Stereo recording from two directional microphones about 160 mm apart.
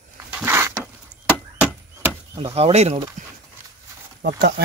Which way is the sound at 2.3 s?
35° right (ahead or behind).